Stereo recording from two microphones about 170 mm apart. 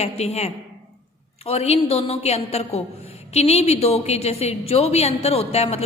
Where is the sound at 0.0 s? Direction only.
40° left (ahead or behind).